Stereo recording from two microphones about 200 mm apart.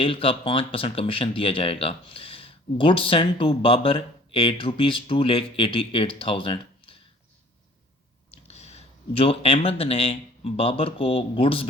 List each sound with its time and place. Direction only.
0.0 s speech: 25° left (ahead or behind)
8.4 s speech: 35° left (ahead or behind)